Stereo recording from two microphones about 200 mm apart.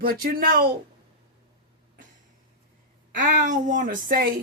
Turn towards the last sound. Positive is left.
turn(degrees=-45)  # may be behind; listen again after turning